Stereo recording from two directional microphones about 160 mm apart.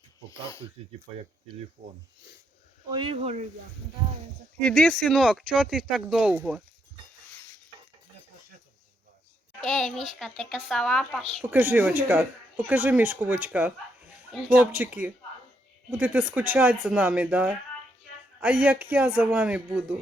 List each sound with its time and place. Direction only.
1.8 s speech: 65° right (ahead or behind)
2.9 s speech: 35° right (ahead or behind)
4.6 s speech: 5° left (ahead or behind)
9.6 s speech: centre (ahead or behind)
11.4 s speech: 15° right (ahead or behind)
14.7 s speech: 10° right (ahead or behind)